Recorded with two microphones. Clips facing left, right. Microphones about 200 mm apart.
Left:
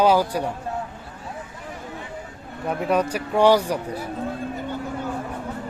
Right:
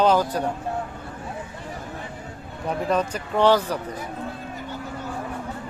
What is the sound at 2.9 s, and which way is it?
Speech, 10° left (ahead or behind).